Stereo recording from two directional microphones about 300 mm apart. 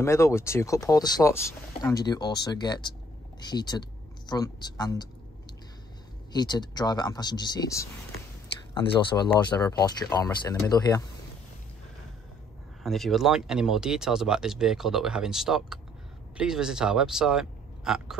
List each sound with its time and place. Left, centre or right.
0.0 s speech: centre
6.3 s speech: centre
12.8 s speech: centre